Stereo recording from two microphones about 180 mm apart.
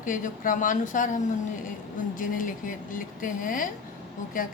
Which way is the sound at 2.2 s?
50° left (ahead or behind).